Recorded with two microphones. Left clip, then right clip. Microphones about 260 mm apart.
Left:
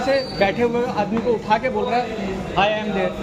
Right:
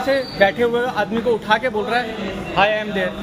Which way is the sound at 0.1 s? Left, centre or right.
Right.